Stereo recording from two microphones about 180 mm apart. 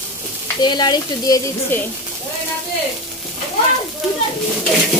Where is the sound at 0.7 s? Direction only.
25° left (ahead or behind).